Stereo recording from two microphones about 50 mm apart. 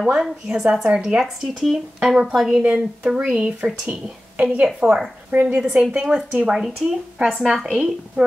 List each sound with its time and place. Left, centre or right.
0.0 s speech: centre
1.2 s speech: centre
2.6 s speech: right
4.7 s a woman's voice: centre